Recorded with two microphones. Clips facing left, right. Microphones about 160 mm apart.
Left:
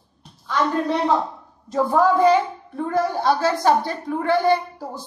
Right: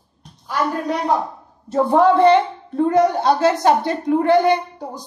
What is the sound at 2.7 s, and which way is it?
A woman's voice, 20° right (ahead or behind).